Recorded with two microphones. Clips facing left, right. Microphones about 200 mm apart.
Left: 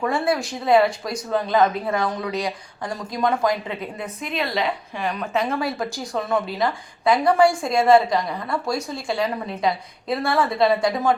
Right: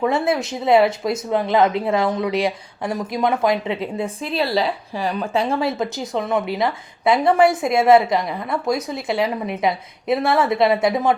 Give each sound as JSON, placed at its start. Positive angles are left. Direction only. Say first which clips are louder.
{"t": 0.1, "sound": "a woman's voice", "louder": "right 2 dB", "side_deg": -20}